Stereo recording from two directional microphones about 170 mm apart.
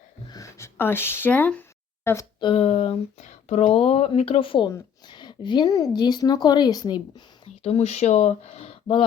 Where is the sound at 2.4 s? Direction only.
35° left (ahead or behind).